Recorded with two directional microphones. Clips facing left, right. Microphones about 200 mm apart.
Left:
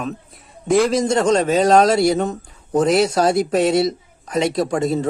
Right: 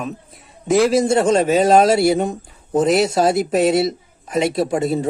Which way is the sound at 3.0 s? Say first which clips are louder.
Right 1 dB; 25° right (ahead or behind).